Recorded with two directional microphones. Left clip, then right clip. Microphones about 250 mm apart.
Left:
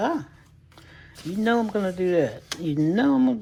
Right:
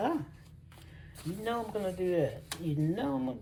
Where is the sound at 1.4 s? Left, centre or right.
Left.